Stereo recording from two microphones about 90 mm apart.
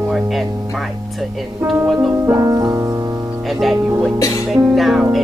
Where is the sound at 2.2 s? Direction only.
25° right (ahead or behind).